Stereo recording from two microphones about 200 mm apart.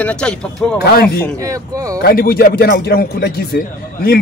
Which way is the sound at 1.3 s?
15° right (ahead or behind).